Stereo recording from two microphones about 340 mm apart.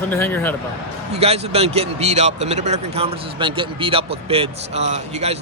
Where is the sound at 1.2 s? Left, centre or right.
Centre.